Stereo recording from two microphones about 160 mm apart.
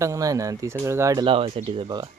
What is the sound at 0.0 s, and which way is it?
Speech, 20° right (ahead or behind).